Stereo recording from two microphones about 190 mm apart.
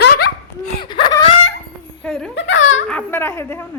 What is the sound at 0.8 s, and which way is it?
Wail, 25° left (ahead or behind).